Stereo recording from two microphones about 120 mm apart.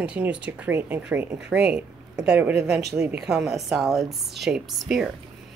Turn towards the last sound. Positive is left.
turn(degrees=0)  # may be behind; listen again after turning